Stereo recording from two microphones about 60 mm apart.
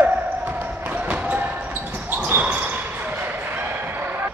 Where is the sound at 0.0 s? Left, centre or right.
Right.